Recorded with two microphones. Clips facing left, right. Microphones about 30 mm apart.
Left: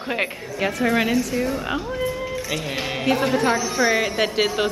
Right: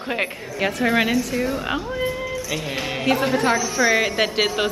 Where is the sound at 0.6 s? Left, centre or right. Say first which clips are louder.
Right 1 dB; centre.